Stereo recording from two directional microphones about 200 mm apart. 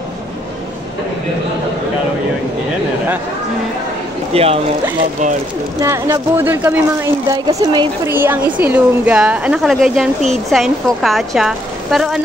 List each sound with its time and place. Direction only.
4.3 s speech: 30° right (ahead or behind)
5.8 s speech: 15° right (ahead or behind)
8.1 s speech: 10° right (ahead or behind)